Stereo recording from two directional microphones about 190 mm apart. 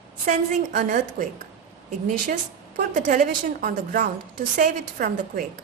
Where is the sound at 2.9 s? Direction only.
45° right (ahead or behind).